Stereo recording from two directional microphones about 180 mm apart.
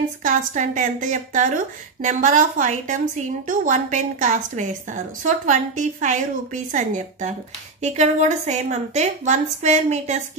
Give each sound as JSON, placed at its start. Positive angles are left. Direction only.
{"t": 0.2, "sound": "a woman's voice", "side_deg": -45}